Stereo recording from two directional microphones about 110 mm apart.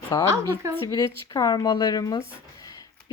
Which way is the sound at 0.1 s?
30° left (ahead or behind).